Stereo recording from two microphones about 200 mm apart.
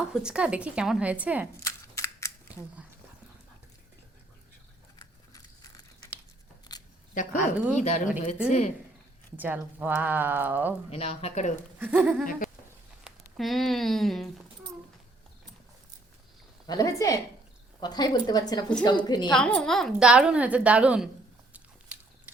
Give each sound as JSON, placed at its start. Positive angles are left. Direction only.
{"t": 0.1, "sound": "a woman's voice", "side_deg": -5}
{"t": 1.5, "sound": "a sound", "side_deg": 15}
{"t": 4.9, "sound": "a sound", "side_deg": 20}
{"t": 6.7, "sound": "camera", "side_deg": 20}
{"t": 7.1, "sound": "a woman's voice", "side_deg": 40}
{"t": 9.4, "sound": "speech", "side_deg": -10}
{"t": 10.9, "sound": "speech", "side_deg": 30}
{"t": 11.8, "sound": "speech", "side_deg": -10}
{"t": 12.2, "sound": "goat", "side_deg": 45}
{"t": 13.1, "sound": "speech", "side_deg": 0}
{"t": 16.6, "sound": "a woman's voice", "side_deg": 15}
{"t": 19.3, "sound": "a woman's voice", "side_deg": 5}
{"t": 21.9, "sound": "biting", "side_deg": -5}